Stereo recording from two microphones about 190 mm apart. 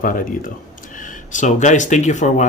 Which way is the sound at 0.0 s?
45° left (ahead or behind).